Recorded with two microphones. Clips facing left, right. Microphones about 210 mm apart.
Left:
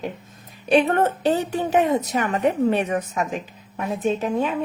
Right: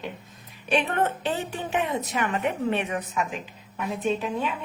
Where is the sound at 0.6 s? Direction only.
40° left (ahead or behind).